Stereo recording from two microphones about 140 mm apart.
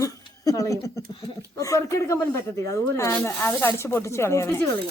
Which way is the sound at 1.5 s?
25° left (ahead or behind).